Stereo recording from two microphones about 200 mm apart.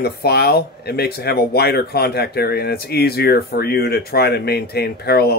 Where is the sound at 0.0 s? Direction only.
55° left (ahead or behind).